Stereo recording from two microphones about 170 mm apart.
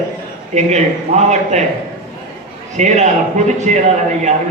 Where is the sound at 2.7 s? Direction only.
45° right (ahead or behind).